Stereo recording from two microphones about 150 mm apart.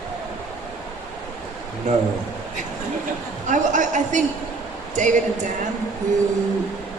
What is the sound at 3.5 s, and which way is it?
Speech, 55° right (ahead or behind).